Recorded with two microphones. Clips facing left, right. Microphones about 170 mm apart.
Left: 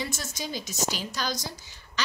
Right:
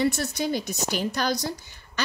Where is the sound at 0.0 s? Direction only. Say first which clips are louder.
Right 10 dB; 65° right (ahead or behind).